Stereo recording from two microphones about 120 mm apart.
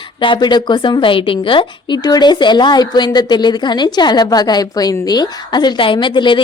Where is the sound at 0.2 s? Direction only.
40° left (ahead or behind).